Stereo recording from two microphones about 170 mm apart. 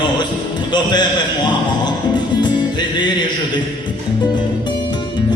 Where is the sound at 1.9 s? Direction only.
25° left (ahead or behind).